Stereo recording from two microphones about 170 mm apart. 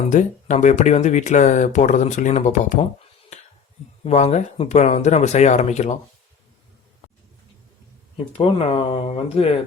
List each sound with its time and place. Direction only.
0.1 s speech: 45° left (ahead or behind)
8.3 s speech: 35° left (ahead or behind)